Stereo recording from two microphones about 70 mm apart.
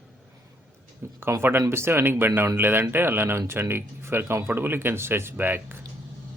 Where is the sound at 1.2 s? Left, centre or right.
Right.